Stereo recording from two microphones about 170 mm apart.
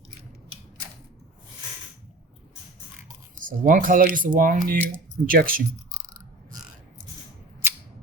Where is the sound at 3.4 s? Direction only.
50° right (ahead or behind).